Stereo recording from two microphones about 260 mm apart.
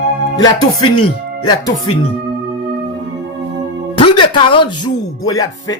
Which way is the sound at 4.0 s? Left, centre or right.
Centre.